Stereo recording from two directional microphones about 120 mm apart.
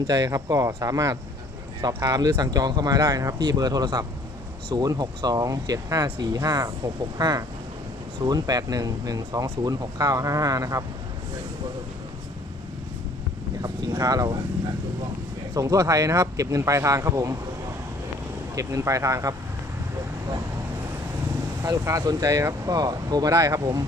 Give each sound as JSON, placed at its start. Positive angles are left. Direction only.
{"t": 0.1, "sound": "speech", "side_deg": -30}
{"t": 13.6, "sound": "speech", "side_deg": -30}
{"t": 15.5, "sound": "speech", "side_deg": -30}
{"t": 18.5, "sound": "speech", "side_deg": -25}
{"t": 21.6, "sound": "speech", "side_deg": -25}